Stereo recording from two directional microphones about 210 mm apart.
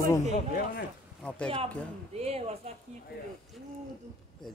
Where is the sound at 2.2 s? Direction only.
30° right (ahead or behind).